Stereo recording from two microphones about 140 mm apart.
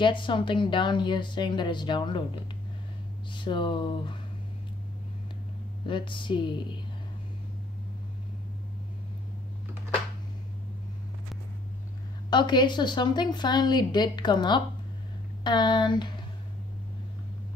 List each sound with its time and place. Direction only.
0.0 s a woman's voice: 35° left (ahead or behind)
3.3 s a woman's voice: 35° left (ahead or behind)
5.9 s a woman's voice: 35° left (ahead or behind)
12.3 s a woman's voice: 30° left (ahead or behind)